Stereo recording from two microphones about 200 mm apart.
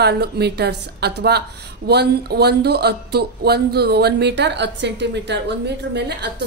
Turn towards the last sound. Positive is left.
turn(degrees=-60)  # may be behind; listen again after turning